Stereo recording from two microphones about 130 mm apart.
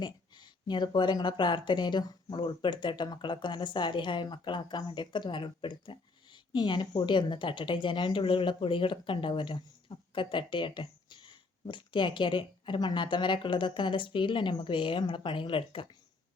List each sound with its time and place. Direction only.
0.0 s speech: 35° left (ahead or behind)